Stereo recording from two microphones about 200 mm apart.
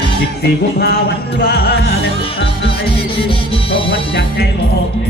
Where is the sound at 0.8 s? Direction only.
55° left (ahead or behind).